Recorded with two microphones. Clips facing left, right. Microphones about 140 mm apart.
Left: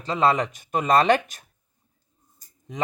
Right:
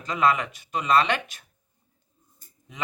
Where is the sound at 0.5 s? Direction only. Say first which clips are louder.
Left 2 dB; 45° left (ahead or behind).